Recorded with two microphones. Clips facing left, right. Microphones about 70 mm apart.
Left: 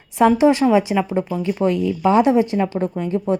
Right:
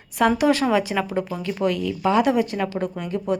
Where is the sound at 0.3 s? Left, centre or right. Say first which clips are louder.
Left 5 dB; left.